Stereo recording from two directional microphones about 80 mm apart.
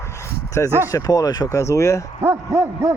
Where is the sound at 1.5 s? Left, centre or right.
Left.